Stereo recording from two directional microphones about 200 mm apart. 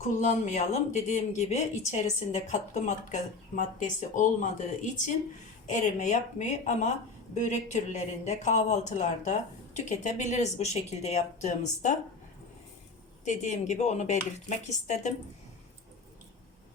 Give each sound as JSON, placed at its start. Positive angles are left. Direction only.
{"t": 0.2, "sound": "a woman's voice", "side_deg": 35}
{"t": 13.2, "sound": "a woman's voice", "side_deg": 35}